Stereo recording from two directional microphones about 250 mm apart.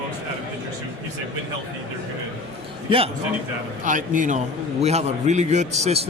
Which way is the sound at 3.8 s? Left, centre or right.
Right.